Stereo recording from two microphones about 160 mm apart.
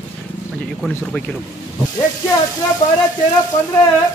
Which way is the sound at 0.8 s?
5° left (ahead or behind).